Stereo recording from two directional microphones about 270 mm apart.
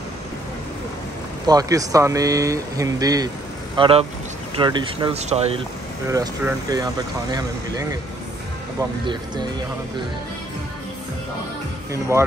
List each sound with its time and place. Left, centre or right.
1.5 s speech: centre
6.0 s speech: centre
9.0 s speech: centre
11.9 s speech: centre